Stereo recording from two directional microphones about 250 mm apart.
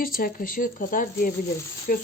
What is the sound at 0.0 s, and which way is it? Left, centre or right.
Speech, left.